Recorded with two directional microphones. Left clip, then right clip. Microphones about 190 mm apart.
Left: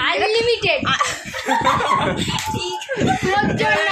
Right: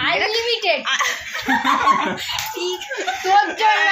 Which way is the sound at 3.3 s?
15° left (ahead or behind).